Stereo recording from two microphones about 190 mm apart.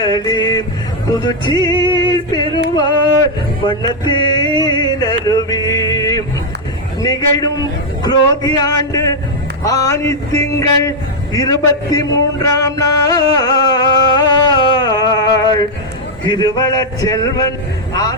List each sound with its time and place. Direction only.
0.0 s music: 20° left (ahead or behind)
2.7 s a sound: 20° left (ahead or behind)
7.0 s music: 20° left (ahead or behind)
9.6 s a sound: 15° left (ahead or behind)
11.3 s music: 20° left (ahead or behind)
17.9 s vehicle: 20° left (ahead or behind)